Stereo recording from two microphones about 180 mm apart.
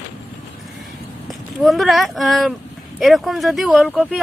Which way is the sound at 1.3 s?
Centre (ahead or behind).